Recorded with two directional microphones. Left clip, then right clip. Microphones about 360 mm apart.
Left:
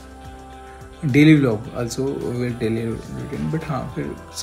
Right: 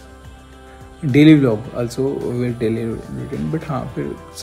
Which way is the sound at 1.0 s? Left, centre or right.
Centre.